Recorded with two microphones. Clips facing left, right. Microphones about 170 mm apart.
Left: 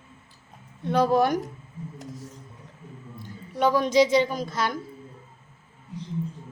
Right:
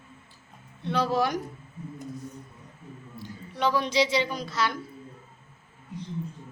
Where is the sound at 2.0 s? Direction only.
90° left.